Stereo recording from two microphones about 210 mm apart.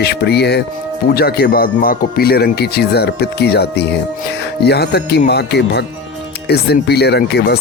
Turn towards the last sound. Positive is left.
turn(degrees=50)  # may be behind; listen again after turning